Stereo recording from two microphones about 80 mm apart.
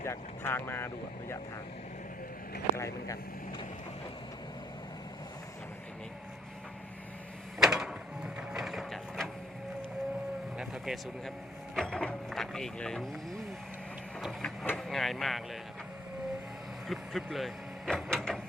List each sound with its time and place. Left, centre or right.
0.0 s speech: left
2.7 s speech: left
7.6 s printer: centre
10.6 s vehicle: centre
11.7 s a sound: centre
14.2 s printer: centre
14.8 s speech: centre
16.9 s speech: centre